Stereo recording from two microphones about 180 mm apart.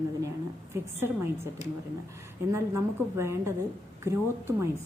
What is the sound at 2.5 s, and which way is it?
A woman's voice, 15° right (ahead or behind).